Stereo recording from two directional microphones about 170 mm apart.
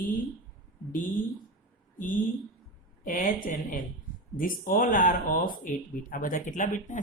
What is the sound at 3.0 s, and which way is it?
Speech, 50° left (ahead or behind).